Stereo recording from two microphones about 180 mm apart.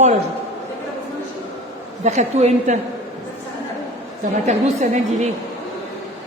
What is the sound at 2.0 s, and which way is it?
Speech, 40° right (ahead or behind).